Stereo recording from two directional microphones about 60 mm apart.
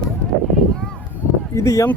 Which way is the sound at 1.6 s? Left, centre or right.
Left.